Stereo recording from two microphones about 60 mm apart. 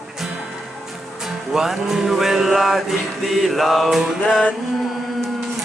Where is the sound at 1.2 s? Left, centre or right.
Centre.